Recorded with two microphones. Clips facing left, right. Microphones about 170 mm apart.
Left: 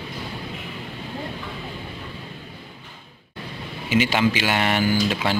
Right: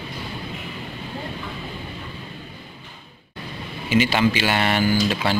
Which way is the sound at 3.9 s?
15° left (ahead or behind).